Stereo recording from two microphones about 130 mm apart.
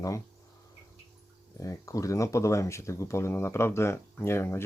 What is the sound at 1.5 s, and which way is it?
Speech, 25° left (ahead or behind).